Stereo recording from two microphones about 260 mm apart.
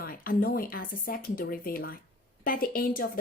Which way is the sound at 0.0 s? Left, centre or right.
Left.